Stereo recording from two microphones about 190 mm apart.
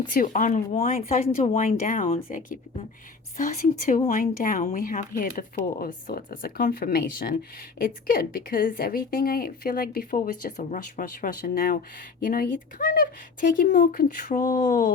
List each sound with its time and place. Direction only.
0.1 s speech: 45° left (ahead or behind)